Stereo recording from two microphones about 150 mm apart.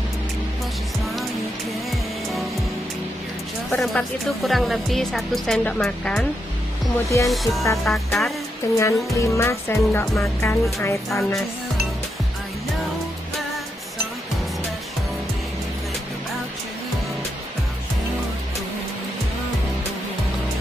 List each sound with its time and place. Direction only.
3.7 s a woman's voice: 5° left (ahead or behind)
7.1 s speech: 20° left (ahead or behind)
7.8 s a woman's voice: centre (ahead or behind)
8.7 s speech: 20° left (ahead or behind)